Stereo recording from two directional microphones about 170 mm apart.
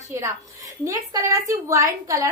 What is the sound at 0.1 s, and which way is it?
A woman's voice, 20° right (ahead or behind).